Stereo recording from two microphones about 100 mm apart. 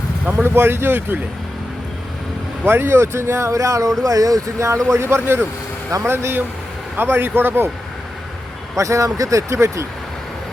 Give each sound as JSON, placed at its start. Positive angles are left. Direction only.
{"t": 0.3, "sound": "speech", "side_deg": -20}
{"t": 2.6, "sound": "speech", "side_deg": -25}
{"t": 8.7, "sound": "speech", "side_deg": -30}